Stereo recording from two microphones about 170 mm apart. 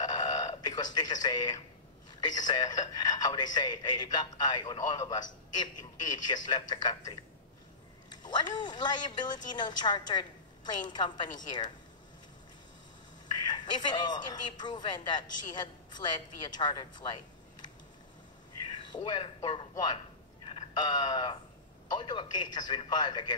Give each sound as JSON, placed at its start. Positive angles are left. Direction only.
{"t": 0.0, "sound": "a sound", "side_deg": 25}
{"t": 2.1, "sound": "speech", "side_deg": 25}
{"t": 13.5, "sound": "speech", "side_deg": 25}
{"t": 18.9, "sound": "a man's voice", "side_deg": 25}